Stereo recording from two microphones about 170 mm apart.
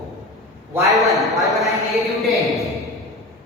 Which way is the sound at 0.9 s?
Centre (ahead or behind).